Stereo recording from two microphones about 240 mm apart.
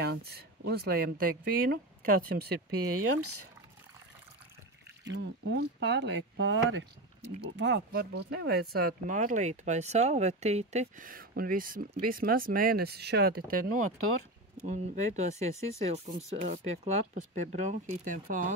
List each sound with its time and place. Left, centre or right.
0.0 s speech: right
2.7 s speech: right
5.1 s speech: right